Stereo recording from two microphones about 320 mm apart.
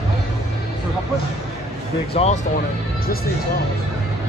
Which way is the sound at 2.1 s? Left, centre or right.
Centre.